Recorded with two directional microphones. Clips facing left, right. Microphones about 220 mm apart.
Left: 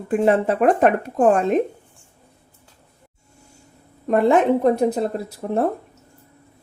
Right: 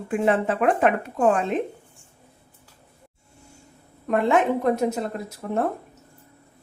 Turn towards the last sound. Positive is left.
turn(degrees=35)  # may be behind; listen again after turning